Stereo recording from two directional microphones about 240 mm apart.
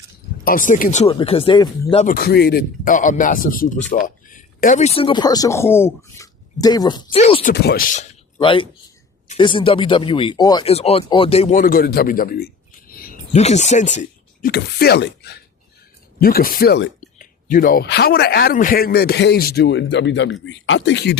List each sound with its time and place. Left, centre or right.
0.4 s speech: left
2.1 s speech: left
7.5 s speech: left
8.4 s speech: left
12.9 s a sound: left
14.0 s a man's voice: left